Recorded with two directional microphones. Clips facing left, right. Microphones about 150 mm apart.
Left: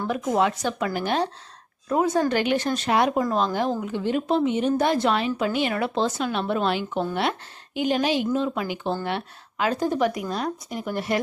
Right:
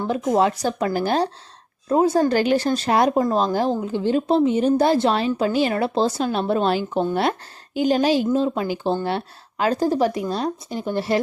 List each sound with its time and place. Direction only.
0.0 s speech: 20° right (ahead or behind)
0.3 s speech: 35° right (ahead or behind)